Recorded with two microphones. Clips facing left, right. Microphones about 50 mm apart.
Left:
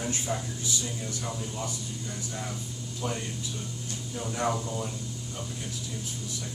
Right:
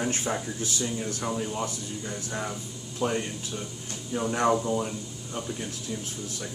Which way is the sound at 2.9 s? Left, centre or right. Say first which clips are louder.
Right 6 dB; right.